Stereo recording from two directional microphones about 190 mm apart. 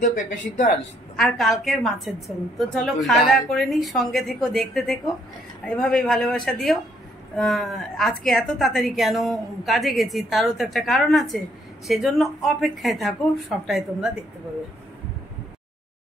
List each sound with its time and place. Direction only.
0.0 s speech: 40° left (ahead or behind)
1.1 s a woman's voice: centre (ahead or behind)